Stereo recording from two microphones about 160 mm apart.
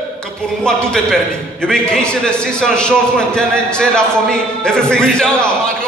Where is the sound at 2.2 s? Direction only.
5° left (ahead or behind).